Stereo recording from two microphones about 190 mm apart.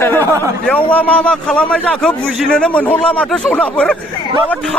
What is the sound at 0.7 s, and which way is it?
A man's voice, 5° left (ahead or behind).